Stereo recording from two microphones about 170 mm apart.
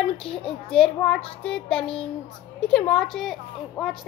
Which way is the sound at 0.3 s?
30° left (ahead or behind).